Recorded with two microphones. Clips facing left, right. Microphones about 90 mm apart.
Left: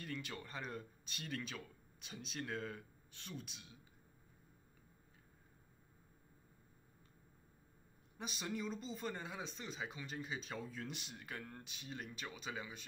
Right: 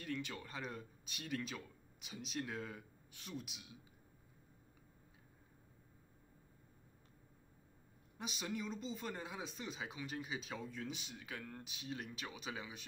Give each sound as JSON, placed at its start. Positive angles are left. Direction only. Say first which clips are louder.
{"t": 0.0, "sound": "speech", "louder": "right 2 dB", "side_deg": 0}
{"t": 8.2, "sound": "speech", "louder": "even", "side_deg": 0}